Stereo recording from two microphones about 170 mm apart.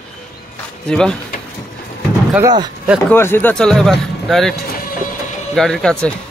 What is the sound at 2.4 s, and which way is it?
Speech, 25° right (ahead or behind).